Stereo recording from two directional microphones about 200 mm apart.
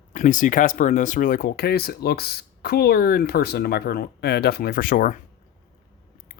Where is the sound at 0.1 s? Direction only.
40° left (ahead or behind).